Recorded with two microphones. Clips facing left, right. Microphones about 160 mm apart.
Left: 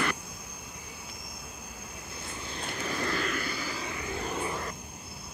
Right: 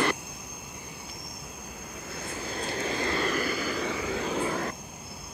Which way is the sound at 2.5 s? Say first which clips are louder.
Right 4 dB; 35° right (ahead or behind).